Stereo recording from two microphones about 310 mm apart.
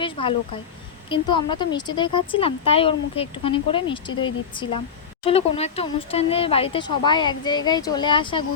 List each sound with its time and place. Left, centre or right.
0.0 s speech: centre